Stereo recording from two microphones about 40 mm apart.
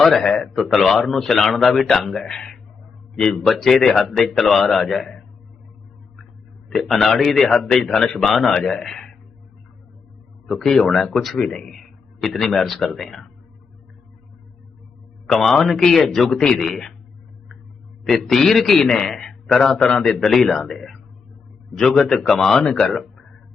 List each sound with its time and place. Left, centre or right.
0.0 s a man's voice: centre
6.7 s a man's voice: centre
8.2 s a man's voice: centre
8.6 s a man's voice: centre
10.4 s a man's voice: centre
11.3 s speech: left
11.7 s speech: centre
15.3 s a man's voice: centre
18.1 s a man's voice: centre
19.8 s speech: left
20.1 s a man's voice: centre
22.6 s speech: left
22.9 s a sound: centre